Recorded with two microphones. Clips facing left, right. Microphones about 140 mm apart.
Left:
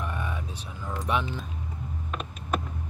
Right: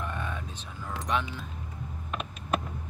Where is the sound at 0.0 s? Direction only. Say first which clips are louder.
Left 1 dB; 10° left (ahead or behind).